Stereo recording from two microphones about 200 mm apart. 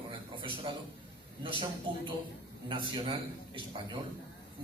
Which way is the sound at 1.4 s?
25° right (ahead or behind).